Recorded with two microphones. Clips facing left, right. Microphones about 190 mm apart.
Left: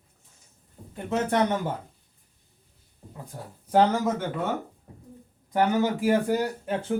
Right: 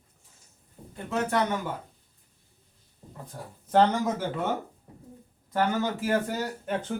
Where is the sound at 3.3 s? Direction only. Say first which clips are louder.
Left 1 dB; 10° left (ahead or behind).